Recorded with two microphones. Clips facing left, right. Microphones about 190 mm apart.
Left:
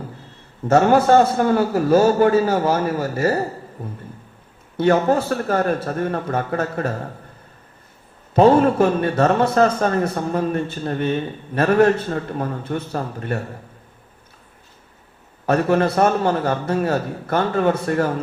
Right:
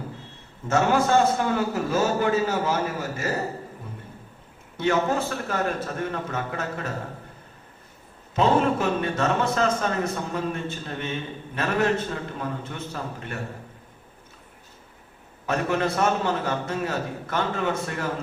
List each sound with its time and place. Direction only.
0.7 s a man's voice: 40° left (ahead or behind)
4.8 s a man's voice: 45° left (ahead or behind)
8.4 s a man's voice: 45° left (ahead or behind)
15.4 s a man's voice: 45° left (ahead or behind)